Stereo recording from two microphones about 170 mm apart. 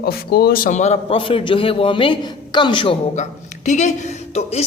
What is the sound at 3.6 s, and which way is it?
A woman's voice, 45° left (ahead or behind).